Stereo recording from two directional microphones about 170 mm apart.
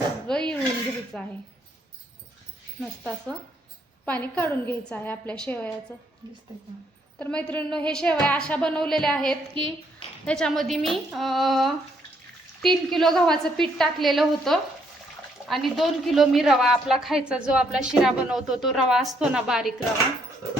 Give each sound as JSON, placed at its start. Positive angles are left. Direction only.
{"t": 0.3, "sound": "dishes", "side_deg": 5}
{"t": 1.1, "sound": "a woman's voice", "side_deg": 5}
{"t": 2.8, "sound": "a woman's voice", "side_deg": 5}
{"t": 6.2, "sound": "speech", "side_deg": -25}
{"t": 7.2, "sound": "a woman's voice", "side_deg": 5}